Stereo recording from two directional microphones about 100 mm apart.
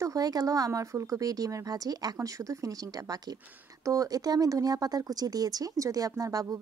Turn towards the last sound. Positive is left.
turn(degrees=-35)  # may be behind; listen again after turning